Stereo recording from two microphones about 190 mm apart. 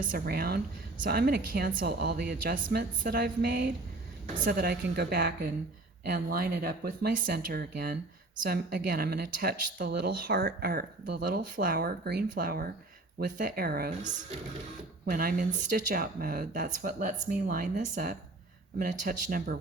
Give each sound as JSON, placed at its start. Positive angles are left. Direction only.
{"t": 0.0, "sound": "a woman's voice", "side_deg": -50}
{"t": 15.1, "sound": "speech", "side_deg": -50}